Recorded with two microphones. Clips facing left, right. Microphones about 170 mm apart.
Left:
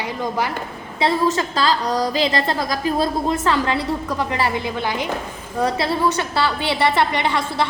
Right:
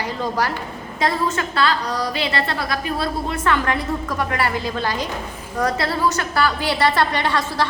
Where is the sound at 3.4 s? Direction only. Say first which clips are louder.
Left 1 dB; 30° left (ahead or behind).